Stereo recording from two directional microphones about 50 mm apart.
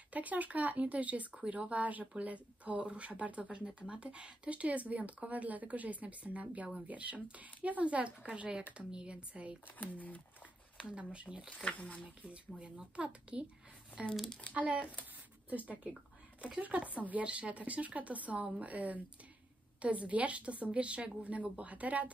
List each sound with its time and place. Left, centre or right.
0.1 s speech: right
9.8 s speech: left
10.8 s speech: centre
11.6 s speech: left
12.2 s speech: right
14.5 s speech: right